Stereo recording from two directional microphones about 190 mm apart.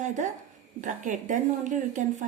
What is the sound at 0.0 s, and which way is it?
A woman's voice, 40° right (ahead or behind).